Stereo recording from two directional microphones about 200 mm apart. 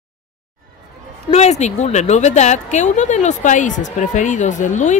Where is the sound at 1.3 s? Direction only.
35° left (ahead or behind).